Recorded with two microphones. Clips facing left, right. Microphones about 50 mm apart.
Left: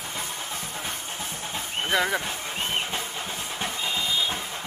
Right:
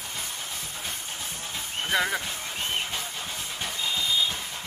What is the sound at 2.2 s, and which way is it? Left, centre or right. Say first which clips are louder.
Vehicle: left 2 dB; left.